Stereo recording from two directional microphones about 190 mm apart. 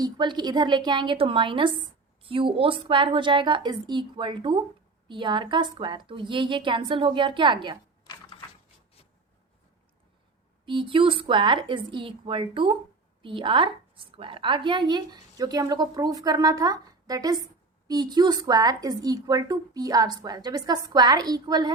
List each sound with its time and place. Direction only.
0.0 s speech: 25° right (ahead or behind)
8.0 s typewriter: 20° left (ahead or behind)
10.7 s speech: 25° right (ahead or behind)